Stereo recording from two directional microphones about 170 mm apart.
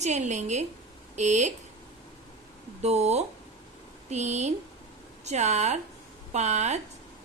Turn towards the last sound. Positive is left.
turn(degrees=-40)  # may be behind; listen again after turning